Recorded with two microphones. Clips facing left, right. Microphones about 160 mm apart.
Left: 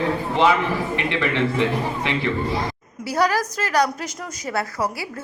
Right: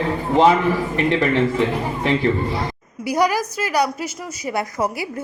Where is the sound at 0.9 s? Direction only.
40° right (ahead or behind).